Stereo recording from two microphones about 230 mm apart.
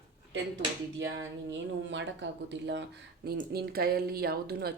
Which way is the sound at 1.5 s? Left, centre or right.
Right.